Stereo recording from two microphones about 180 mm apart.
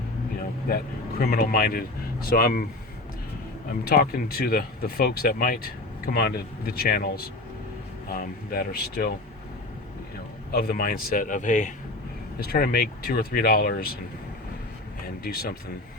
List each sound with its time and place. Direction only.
1.2 s speech: 55° left (ahead or behind)
3.7 s speech: 60° left (ahead or behind)
8.5 s speech: 55° left (ahead or behind)
10.5 s speech: 55° left (ahead or behind)
12.4 s speech: 55° left (ahead or behind)
15.0 s speech: 60° left (ahead or behind)